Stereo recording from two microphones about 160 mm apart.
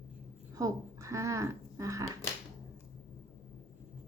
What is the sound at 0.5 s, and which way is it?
Speech, 20° right (ahead or behind).